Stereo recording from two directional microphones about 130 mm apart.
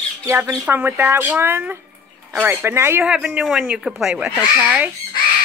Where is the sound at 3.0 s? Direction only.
5° right (ahead or behind).